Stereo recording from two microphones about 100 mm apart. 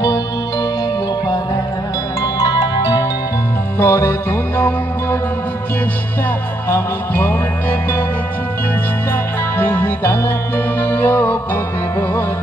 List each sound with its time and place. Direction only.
2.4 s music: 40° left (ahead or behind)
3.8 s music: 20° left (ahead or behind)
6.7 s music: 20° left (ahead or behind)
9.6 s music: 20° left (ahead or behind)